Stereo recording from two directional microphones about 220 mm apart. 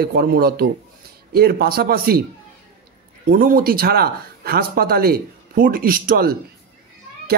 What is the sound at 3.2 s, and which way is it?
A child's voice, 40° right (ahead or behind).